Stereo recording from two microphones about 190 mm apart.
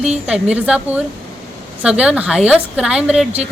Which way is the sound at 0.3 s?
5° right (ahead or behind).